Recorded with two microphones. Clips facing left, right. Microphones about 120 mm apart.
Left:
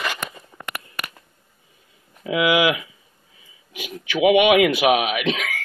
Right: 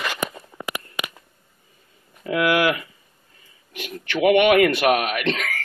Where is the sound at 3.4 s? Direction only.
Centre (ahead or behind).